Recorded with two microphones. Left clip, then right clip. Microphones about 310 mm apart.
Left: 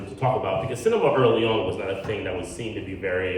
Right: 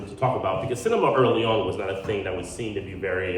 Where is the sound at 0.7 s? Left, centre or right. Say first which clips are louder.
Left 1 dB; centre.